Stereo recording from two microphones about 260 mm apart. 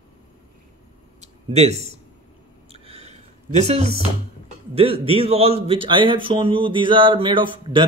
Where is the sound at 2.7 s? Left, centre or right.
Right.